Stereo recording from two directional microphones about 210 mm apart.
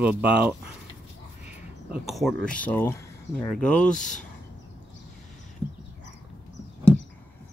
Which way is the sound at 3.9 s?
35° left (ahead or behind).